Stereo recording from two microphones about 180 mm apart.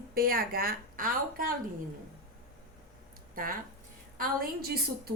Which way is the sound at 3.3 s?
50° right (ahead or behind).